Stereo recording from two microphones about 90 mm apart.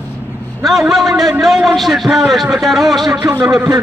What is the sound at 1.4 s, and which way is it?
A man's voice, 5° right (ahead or behind).